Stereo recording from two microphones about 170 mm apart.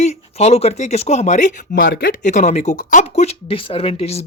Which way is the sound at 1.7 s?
65° left (ahead or behind).